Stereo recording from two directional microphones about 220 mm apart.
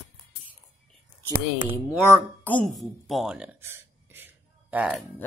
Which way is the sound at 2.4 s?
5° left (ahead or behind).